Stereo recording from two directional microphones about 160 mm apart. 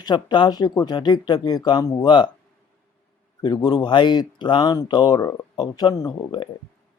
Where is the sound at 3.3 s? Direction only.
25° left (ahead or behind).